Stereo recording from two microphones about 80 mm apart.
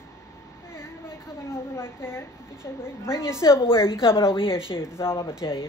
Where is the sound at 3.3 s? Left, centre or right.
Left.